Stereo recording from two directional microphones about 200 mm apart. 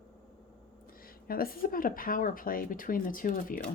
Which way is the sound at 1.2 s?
50° left (ahead or behind).